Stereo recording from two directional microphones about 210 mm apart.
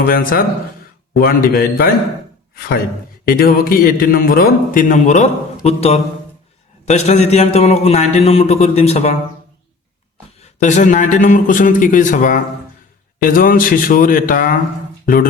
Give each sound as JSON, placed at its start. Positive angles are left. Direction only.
{"t": 0.0, "sound": "a man's voice", "side_deg": 45}
{"t": 3.2, "sound": "a man's voice", "side_deg": 45}
{"t": 10.6, "sound": "a man's voice", "side_deg": 35}